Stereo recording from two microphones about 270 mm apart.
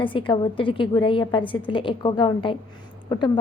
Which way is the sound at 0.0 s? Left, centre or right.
Centre.